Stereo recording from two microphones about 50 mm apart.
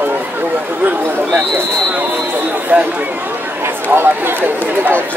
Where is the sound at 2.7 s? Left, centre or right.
Right.